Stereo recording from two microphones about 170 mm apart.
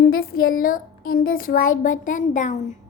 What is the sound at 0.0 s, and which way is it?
Speech, 60° left (ahead or behind).